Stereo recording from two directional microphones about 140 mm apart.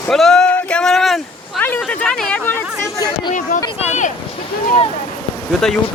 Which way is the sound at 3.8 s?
55° left (ahead or behind).